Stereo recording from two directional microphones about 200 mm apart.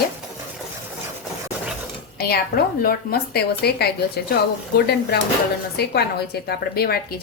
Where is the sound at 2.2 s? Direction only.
50° left (ahead or behind).